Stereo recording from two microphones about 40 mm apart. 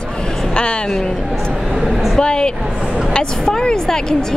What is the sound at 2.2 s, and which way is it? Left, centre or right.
A woman's voice, centre.